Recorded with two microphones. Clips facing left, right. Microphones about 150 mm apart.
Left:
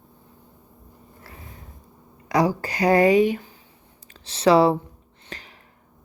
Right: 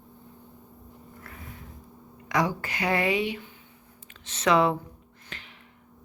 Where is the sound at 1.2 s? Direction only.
30° left (ahead or behind).